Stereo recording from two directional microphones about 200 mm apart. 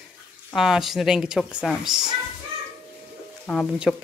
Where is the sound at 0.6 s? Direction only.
Centre (ahead or behind).